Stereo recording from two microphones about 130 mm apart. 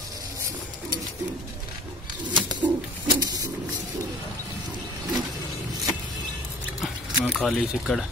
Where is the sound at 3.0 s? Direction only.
30° right (ahead or behind).